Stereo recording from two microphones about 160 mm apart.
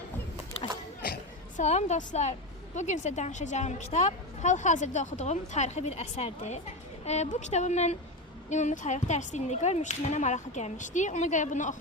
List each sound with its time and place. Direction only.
1.5 s a woman's voice: 45° left (ahead or behind)